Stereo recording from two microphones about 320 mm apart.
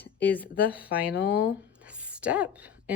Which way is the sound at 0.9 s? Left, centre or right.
Left.